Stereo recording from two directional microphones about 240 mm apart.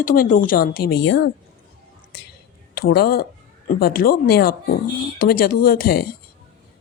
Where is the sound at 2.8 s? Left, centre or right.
Left.